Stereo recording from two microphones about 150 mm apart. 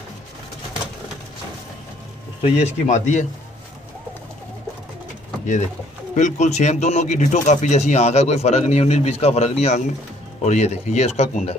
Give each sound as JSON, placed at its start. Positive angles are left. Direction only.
{"t": 2.4, "sound": "speech", "side_deg": 50}
{"t": 6.1, "sound": "speech", "side_deg": 50}